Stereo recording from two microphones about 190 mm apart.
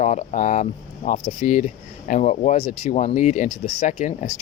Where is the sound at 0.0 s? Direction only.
35° left (ahead or behind).